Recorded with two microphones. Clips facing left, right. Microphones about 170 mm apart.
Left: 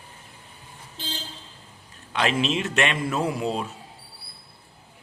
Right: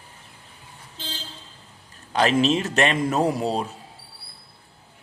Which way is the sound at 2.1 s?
40° right (ahead or behind).